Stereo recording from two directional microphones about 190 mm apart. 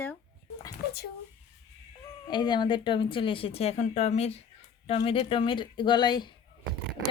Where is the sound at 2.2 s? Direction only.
25° left (ahead or behind).